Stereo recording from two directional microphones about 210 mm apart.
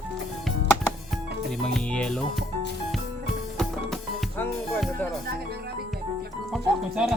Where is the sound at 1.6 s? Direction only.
5° left (ahead or behind).